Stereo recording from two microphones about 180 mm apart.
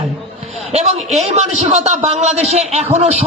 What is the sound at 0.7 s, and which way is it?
A man's voice, 35° right (ahead or behind).